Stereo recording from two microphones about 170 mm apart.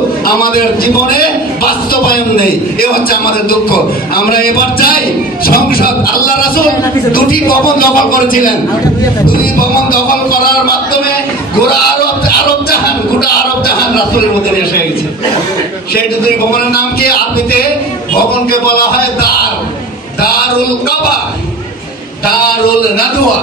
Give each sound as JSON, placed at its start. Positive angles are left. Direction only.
{"t": 0.2, "sound": "a man's voice", "side_deg": 60}
{"t": 13.2, "sound": "a man's voice", "side_deg": 65}
{"t": 16.7, "sound": "a man's voice", "side_deg": 65}